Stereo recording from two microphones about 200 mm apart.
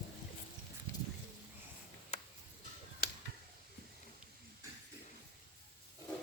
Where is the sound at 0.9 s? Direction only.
15° left (ahead or behind).